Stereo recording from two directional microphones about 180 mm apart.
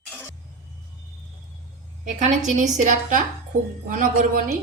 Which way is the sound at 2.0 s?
40° right (ahead or behind).